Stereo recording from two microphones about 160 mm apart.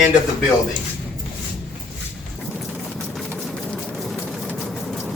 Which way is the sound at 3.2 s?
Centre (ahead or behind).